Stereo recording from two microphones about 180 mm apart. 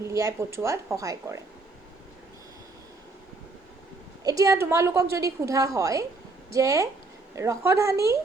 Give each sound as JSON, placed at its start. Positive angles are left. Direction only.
{"t": 0.0, "sound": "a woman's voice", "side_deg": -15}
{"t": 4.2, "sound": "a woman's voice", "side_deg": -20}